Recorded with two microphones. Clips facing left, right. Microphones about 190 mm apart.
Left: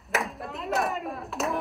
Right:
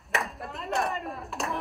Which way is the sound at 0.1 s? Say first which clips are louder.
Left 2 dB; centre (ahead or behind).